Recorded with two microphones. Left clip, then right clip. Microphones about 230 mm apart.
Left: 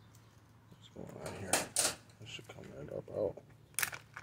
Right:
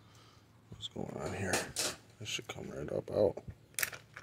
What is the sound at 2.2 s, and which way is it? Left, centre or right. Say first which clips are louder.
Speech: right 13 dB; right.